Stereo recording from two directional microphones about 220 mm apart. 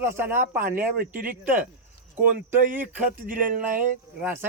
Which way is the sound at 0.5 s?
40° right (ahead or behind).